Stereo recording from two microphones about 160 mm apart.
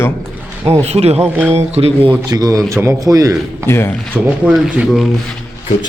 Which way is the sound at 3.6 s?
15° left (ahead or behind).